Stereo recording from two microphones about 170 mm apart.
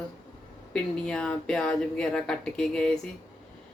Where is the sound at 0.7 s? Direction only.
5° left (ahead or behind).